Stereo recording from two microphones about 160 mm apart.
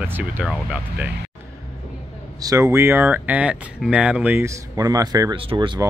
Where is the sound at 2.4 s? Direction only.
20° right (ahead or behind).